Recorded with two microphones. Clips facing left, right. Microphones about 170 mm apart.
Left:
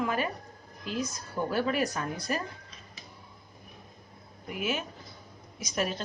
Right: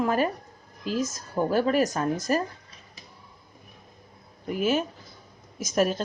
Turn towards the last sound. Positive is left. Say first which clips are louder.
# right 7 dB
turn(degrees=-45)  # may be behind; listen again after turning